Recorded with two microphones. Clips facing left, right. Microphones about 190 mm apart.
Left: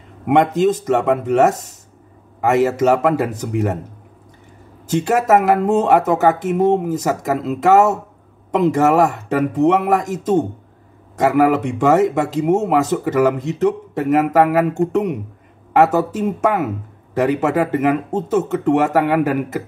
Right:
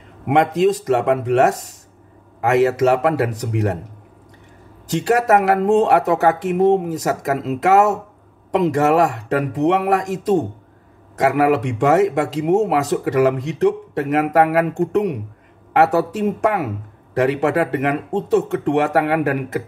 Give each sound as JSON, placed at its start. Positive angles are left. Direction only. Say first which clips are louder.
{"t": 0.3, "sound": "speech", "louder": "left 1 dB", "side_deg": 0}
{"t": 4.8, "sound": "speech", "louder": "even", "side_deg": 0}